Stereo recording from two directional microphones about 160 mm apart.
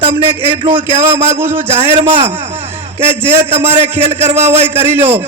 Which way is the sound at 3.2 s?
15° right (ahead or behind).